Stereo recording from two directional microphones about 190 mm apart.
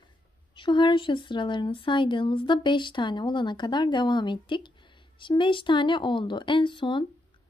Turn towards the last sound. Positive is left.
turn(degrees=25)  # may be behind; listen again after turning